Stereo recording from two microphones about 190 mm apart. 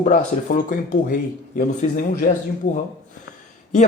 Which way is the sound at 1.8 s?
40° left (ahead or behind).